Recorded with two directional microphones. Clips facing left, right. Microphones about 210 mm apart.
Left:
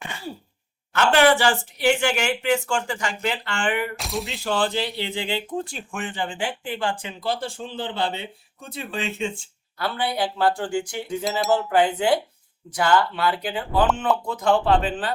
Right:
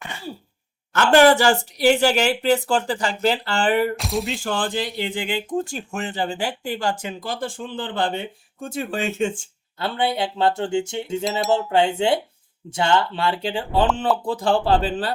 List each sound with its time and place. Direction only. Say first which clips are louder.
1.1 s speech: right 5 dB; 40° right (ahead or behind)
3.9 s speech: right 5 dB; centre (ahead or behind)
4.4 s speech: left 1 dB; 50° right (ahead or behind)
9.7 s a sound: right 2 dB; 25° right (ahead or behind)
11.3 s speech: even; centre (ahead or behind)
11.7 s a sound: even; 25° right (ahead or behind)
14.3 s speech: even; 30° right (ahead or behind)